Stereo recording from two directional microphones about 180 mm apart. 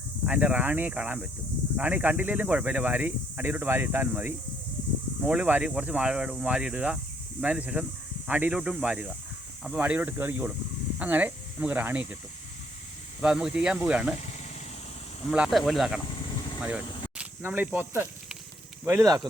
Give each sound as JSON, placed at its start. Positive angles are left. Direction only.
{"t": 0.3, "sound": "speech", "side_deg": -10}
{"t": 13.2, "sound": "speech", "side_deg": -5}
{"t": 15.3, "sound": "speech", "side_deg": 0}